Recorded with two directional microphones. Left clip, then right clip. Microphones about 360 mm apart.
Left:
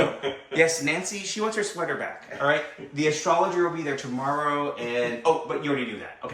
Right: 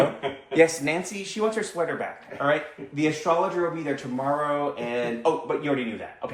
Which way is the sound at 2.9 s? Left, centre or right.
Centre.